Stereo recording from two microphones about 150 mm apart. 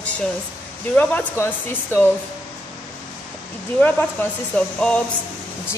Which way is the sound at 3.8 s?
10° left (ahead or behind).